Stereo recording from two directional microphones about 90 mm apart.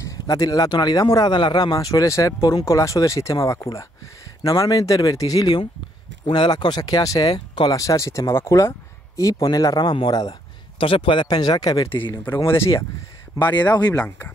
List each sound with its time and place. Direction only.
0.0 s speech: 40° left (ahead or behind)
6.2 s speech: 60° left (ahead or behind); by 7.3 s 40° left (ahead or behind)
7.3 s speech: 65° left (ahead or behind)
7.7 s speech: 40° left (ahead or behind)
10.8 s a man's voice: 80° left
11.2 s speech: 50° left (ahead or behind)
11.9 s speech: 25° left (ahead or behind)
13.9 s speech: 20° left (ahead or behind)